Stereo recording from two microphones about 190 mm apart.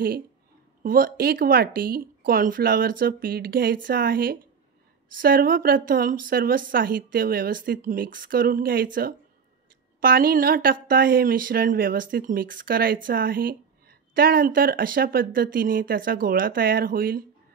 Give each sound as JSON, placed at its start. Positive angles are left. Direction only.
{"t": 0.8, "sound": "speech", "side_deg": -50}